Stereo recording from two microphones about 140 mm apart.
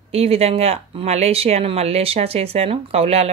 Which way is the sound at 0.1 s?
45° right (ahead or behind).